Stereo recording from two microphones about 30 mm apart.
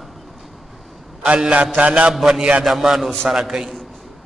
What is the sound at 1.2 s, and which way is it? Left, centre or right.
Speech, right.